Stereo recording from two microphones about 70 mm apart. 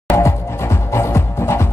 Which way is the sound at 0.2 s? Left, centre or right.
Left.